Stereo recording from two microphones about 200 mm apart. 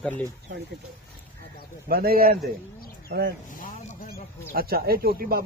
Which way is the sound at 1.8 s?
50° right (ahead or behind).